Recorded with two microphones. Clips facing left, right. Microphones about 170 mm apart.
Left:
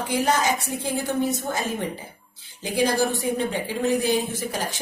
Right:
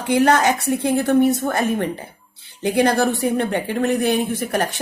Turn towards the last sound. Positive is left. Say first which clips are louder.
# right 7 dB
turn(degrees=-65)  # may be behind; listen again after turning